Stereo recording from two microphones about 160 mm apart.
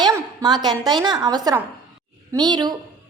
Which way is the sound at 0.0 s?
25° right (ahead or behind).